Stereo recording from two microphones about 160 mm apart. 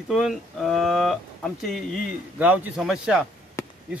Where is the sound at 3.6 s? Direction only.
20° left (ahead or behind).